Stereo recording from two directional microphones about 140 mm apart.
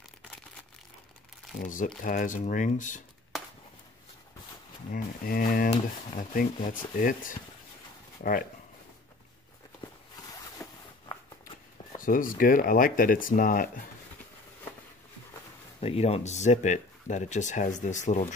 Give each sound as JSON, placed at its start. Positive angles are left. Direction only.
{"t": 1.6, "sound": "speech", "side_deg": 70}
{"t": 4.9, "sound": "speech", "side_deg": 90}
{"t": 6.1, "sound": "speech", "side_deg": 70}
{"t": 7.0, "sound": "speech", "side_deg": 80}
{"t": 10.3, "sound": "zipper", "side_deg": 25}
{"t": 12.0, "sound": "speech", "side_deg": 75}
{"t": 15.8, "sound": "speech", "side_deg": 45}